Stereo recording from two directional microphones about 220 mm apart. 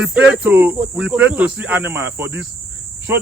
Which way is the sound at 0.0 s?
5° right (ahead or behind).